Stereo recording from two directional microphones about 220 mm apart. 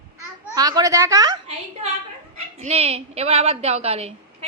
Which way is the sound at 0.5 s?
15° right (ahead or behind).